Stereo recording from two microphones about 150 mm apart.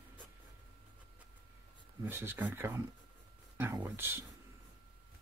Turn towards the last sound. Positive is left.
turn(degrees=-15)  # may be behind; listen again after turning